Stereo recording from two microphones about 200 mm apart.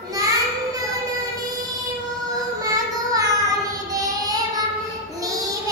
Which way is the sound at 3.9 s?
15° right (ahead or behind).